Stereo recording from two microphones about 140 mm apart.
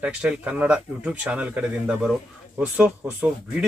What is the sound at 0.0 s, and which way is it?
Speech, 10° right (ahead or behind).